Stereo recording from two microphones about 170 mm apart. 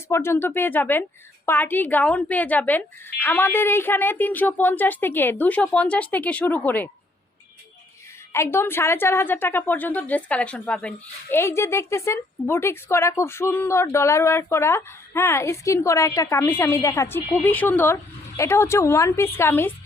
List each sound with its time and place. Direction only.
0.1 s a woman's voice: 15° left (ahead or behind)
8.3 s a woman's voice: 15° left (ahead or behind)